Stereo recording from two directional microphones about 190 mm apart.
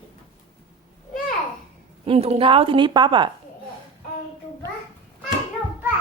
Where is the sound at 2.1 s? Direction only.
30° right (ahead or behind).